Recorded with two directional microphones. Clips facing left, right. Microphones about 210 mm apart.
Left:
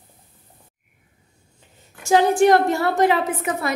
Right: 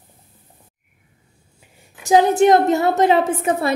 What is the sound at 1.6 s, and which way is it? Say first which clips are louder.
A woman's voice: even; 15° right (ahead or behind).